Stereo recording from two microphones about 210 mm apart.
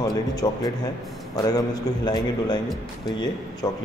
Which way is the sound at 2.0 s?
20° left (ahead or behind).